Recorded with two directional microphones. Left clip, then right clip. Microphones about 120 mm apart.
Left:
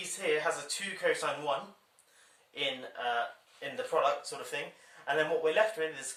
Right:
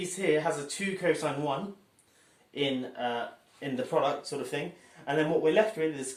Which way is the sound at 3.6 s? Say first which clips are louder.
Right 2 dB; 15° right (ahead or behind).